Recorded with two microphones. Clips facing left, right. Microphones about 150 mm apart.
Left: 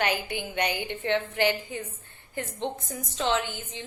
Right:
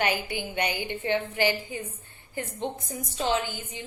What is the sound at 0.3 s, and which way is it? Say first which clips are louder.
Speech: even; 55° left (ahead or behind).